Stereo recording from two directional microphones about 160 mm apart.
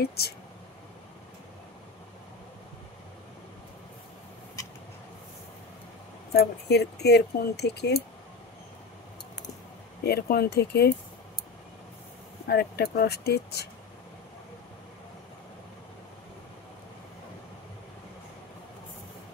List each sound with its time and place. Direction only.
0.0 s speech: 80° left
6.3 s speech: 90° left
10.0 s speech: 80° left
12.4 s speech: 80° left